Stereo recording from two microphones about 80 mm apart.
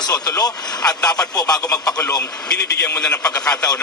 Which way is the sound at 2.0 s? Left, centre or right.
Left.